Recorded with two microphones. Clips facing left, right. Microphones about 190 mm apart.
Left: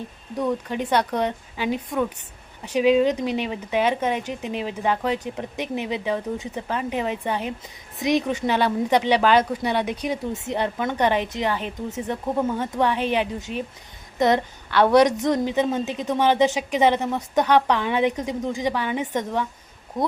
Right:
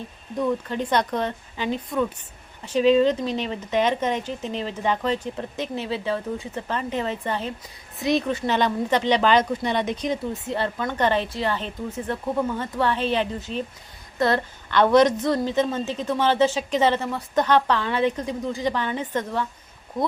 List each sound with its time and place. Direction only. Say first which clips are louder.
0.3 s speech: even; 10° left (ahead or behind)